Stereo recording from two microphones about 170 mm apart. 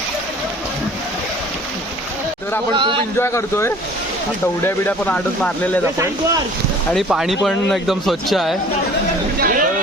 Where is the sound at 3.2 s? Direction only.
15° left (ahead or behind).